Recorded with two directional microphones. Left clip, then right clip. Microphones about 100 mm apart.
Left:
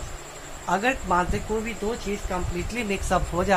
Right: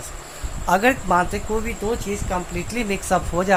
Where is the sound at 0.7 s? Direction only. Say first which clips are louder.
Right 6 dB; 70° right (ahead or behind).